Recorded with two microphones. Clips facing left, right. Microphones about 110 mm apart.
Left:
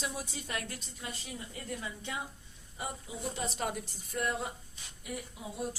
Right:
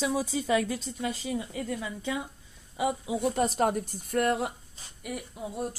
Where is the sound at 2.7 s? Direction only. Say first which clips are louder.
Right 12 dB; 90° right.